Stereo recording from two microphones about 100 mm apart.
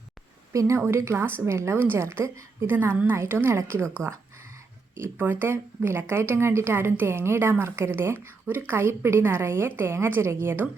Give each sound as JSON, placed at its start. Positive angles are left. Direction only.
{"t": 0.5, "sound": "a woman's voice", "side_deg": -35}
{"t": 4.9, "sound": "a woman's voice", "side_deg": -20}